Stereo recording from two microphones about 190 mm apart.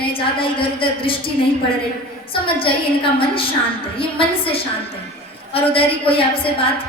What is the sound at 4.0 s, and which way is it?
A woman's voice, 30° left (ahead or behind).